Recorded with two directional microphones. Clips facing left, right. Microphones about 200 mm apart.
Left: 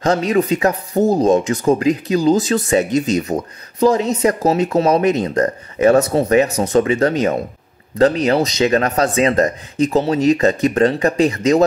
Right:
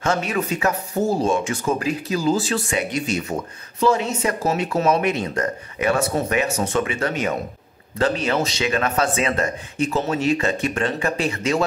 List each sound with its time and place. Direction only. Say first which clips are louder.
0.0 s speech: left 7 dB; 35° left (ahead or behind)